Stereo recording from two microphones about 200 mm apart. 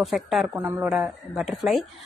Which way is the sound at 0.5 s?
15° right (ahead or behind).